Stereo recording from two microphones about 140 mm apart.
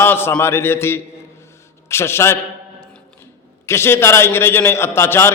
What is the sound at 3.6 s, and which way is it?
A man's voice, 20° left (ahead or behind).